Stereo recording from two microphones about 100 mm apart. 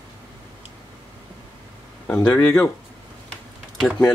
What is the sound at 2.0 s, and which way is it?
Speech, 15° left (ahead or behind).